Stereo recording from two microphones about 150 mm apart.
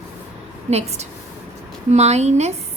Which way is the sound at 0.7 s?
45° right (ahead or behind).